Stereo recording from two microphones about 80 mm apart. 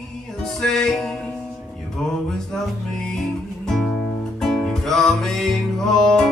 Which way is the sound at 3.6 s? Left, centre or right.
Centre.